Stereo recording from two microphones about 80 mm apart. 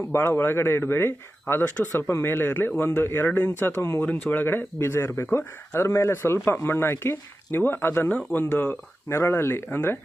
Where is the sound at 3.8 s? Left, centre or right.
Left.